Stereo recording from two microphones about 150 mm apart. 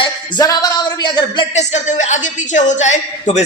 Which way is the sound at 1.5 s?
50° left (ahead or behind).